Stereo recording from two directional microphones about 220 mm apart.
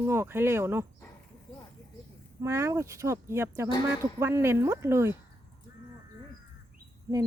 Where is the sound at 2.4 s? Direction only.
15° right (ahead or behind).